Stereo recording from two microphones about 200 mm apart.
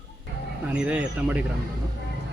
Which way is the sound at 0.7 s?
5° right (ahead or behind).